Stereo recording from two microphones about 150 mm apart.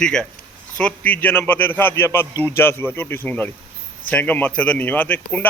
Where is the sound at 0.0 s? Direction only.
5° left (ahead or behind).